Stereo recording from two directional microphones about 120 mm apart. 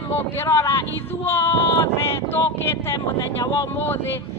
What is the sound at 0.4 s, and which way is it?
A man's voice, 20° left (ahead or behind).